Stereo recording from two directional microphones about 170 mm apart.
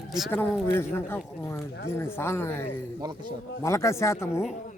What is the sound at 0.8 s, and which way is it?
Speech, 15° left (ahead or behind).